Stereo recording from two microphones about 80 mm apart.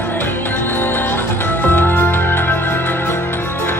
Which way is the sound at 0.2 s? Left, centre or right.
Left.